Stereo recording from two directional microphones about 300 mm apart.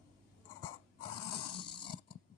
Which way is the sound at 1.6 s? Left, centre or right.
Centre.